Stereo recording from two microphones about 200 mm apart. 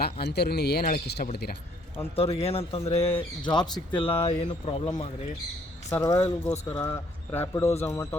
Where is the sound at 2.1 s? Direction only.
30° left (ahead or behind).